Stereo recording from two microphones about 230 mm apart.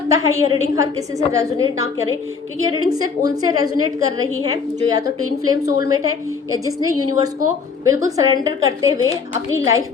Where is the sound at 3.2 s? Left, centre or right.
Centre.